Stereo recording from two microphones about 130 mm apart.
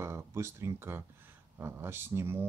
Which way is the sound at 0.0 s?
20° right (ahead or behind).